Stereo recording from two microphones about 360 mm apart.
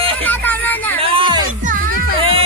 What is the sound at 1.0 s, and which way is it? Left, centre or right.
Music, centre.